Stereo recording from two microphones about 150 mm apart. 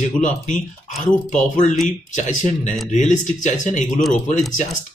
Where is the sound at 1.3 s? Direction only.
55° left (ahead or behind).